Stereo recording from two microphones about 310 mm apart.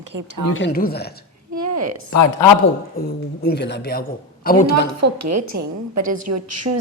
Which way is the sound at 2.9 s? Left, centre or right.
Left.